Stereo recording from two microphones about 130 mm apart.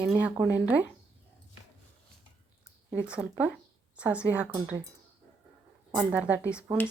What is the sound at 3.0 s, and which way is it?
Speech, 10° right (ahead or behind).